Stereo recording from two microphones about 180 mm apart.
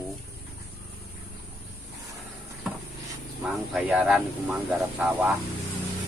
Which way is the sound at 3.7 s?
10° right (ahead or behind).